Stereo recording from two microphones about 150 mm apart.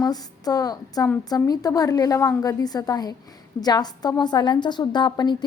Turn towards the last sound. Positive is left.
turn(degrees=30)  # may be behind; listen again after turning